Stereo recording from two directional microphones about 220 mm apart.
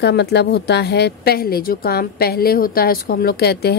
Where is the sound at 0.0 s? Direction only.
50° left (ahead or behind).